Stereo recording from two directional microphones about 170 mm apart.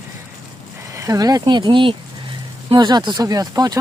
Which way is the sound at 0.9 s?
20° right (ahead or behind).